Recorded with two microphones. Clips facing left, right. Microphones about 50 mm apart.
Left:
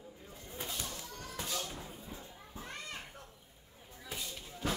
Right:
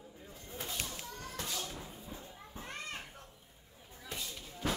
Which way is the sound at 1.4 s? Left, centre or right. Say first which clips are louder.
Left 2 dB; centre.